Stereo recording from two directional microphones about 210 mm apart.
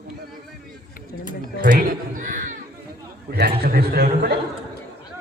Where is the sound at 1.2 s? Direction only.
40° right (ahead or behind).